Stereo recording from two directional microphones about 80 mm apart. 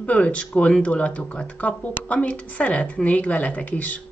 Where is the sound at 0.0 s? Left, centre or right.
Centre.